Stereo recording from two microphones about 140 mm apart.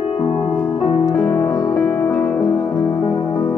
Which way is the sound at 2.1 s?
10° left (ahead or behind).